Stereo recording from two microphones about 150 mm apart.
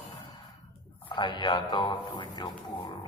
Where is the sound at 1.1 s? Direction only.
30° left (ahead or behind).